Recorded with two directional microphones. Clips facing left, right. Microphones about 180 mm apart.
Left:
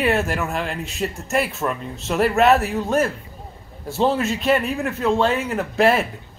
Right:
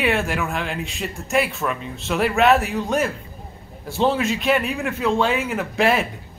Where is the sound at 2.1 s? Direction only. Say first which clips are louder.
Left 1 dB; centre (ahead or behind).